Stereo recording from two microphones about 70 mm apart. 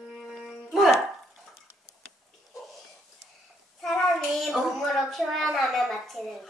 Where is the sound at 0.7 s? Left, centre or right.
Centre.